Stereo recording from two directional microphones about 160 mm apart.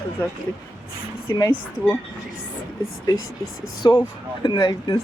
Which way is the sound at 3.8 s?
25° left (ahead or behind).